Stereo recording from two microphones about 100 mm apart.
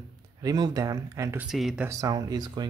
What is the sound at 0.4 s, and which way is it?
Speech, 40° right (ahead or behind).